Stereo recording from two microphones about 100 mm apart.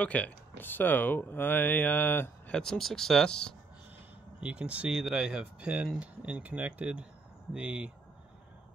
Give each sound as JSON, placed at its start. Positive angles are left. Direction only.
{"t": 0.0, "sound": "speech", "side_deg": 15}
{"t": 2.5, "sound": "speech", "side_deg": 5}
{"t": 4.4, "sound": "speech", "side_deg": -10}